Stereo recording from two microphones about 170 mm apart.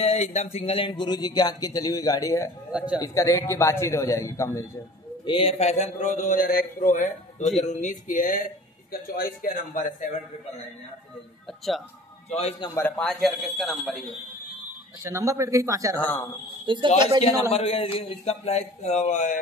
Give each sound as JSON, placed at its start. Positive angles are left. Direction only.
{"t": 0.0, "sound": "speech", "side_deg": 40}
{"t": 2.7, "sound": "speech", "side_deg": -5}
{"t": 3.0, "sound": "a man's voice", "side_deg": 20}
{"t": 5.2, "sound": "a man's voice", "side_deg": 30}
{"t": 9.8, "sound": "a man's voice", "side_deg": 50}
{"t": 12.3, "sound": "a man's voice", "side_deg": 40}
{"t": 13.0, "sound": "speech", "side_deg": 0}
{"t": 15.0, "sound": "speech", "side_deg": -15}
{"t": 16.0, "sound": "a man's voice", "side_deg": 10}
{"t": 16.6, "sound": "speech", "side_deg": -30}
{"t": 17.5, "sound": "a man's voice", "side_deg": 35}